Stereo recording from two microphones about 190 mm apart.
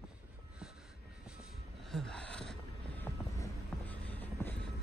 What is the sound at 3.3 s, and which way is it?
Music, 15° left (ahead or behind).